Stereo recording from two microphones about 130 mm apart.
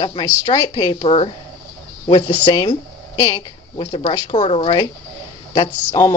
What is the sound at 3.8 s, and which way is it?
Speech, 45° left (ahead or behind).